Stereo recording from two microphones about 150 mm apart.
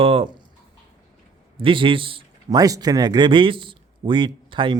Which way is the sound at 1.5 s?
35° right (ahead or behind).